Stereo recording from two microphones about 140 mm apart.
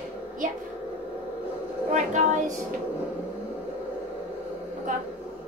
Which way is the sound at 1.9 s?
60° right (ahead or behind).